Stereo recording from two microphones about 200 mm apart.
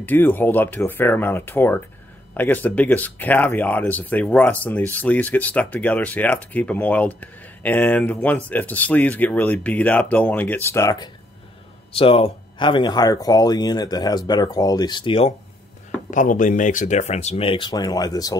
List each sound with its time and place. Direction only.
0.0 s speech: 10° left (ahead or behind)
11.9 s speech: 30° left (ahead or behind)
16.1 s speech: 40° left (ahead or behind); by 18.3 s 20° left (ahead or behind)